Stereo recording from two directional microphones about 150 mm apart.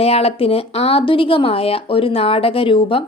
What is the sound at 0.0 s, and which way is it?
A woman's voice, 40° left (ahead or behind).